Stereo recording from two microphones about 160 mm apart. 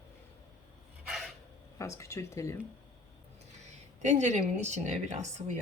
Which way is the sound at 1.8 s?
20° left (ahead or behind).